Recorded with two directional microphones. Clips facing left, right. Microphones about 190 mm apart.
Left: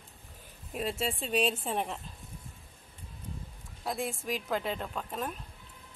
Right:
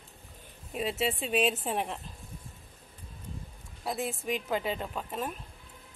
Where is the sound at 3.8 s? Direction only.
5° right (ahead or behind).